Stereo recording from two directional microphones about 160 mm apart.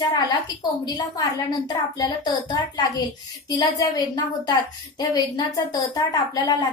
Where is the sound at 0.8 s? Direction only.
25° left (ahead or behind).